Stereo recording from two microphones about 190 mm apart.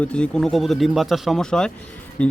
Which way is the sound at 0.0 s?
5° left (ahead or behind).